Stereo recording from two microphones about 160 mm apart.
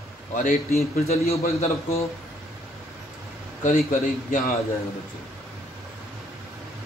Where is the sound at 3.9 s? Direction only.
55° left (ahead or behind).